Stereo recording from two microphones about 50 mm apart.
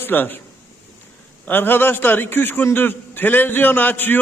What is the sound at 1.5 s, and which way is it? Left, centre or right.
A man's voice, left.